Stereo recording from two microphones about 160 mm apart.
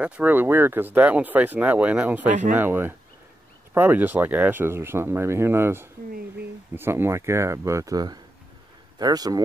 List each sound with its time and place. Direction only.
0.0 s speech: 10° right (ahead or behind)
2.2 s speech: 50° right (ahead or behind)
2.5 s speech: 10° right (ahead or behind)